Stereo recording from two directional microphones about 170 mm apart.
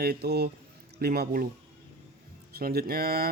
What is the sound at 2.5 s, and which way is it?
Speech, 65° right (ahead or behind).